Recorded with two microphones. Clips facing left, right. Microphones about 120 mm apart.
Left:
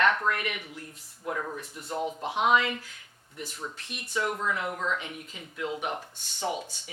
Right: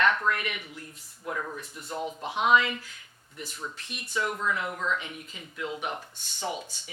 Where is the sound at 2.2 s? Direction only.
50° left (ahead or behind).